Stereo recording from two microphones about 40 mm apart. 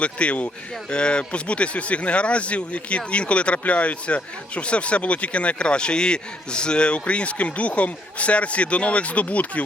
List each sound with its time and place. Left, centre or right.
0.0 s speech: left